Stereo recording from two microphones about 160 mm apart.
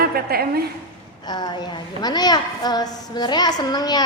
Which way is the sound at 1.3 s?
25° left (ahead or behind).